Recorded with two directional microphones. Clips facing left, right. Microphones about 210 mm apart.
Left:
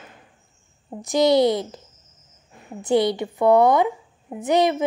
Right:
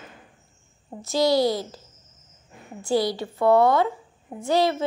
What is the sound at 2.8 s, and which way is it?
A woman's voice, 20° left (ahead or behind).